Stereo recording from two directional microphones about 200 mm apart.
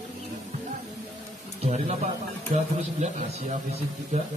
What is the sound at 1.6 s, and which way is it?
Speech, 30° right (ahead or behind).